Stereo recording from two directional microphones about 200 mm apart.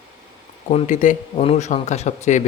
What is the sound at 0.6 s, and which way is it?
A man's voice, 35° left (ahead or behind).